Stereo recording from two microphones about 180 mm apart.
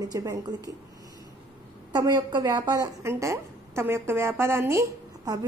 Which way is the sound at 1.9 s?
20° right (ahead or behind).